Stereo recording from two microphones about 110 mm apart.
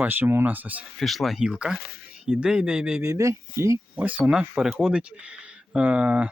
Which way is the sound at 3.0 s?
25° right (ahead or behind).